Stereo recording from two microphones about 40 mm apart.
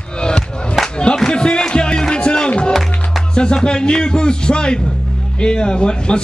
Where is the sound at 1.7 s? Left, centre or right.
Left.